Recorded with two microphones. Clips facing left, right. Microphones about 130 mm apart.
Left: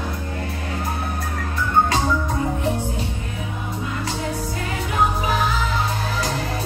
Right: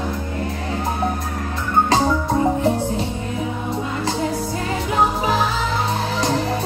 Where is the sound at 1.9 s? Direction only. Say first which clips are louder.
Right 4 dB; 30° right (ahead or behind).